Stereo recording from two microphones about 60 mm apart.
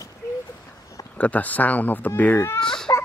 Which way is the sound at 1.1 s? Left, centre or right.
Left.